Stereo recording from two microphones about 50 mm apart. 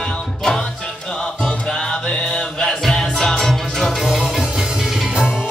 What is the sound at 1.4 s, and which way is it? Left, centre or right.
Music, centre.